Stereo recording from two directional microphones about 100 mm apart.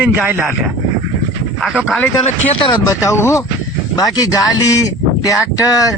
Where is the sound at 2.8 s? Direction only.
30° left (ahead or behind).